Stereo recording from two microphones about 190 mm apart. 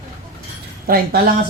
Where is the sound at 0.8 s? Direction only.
50° right (ahead or behind).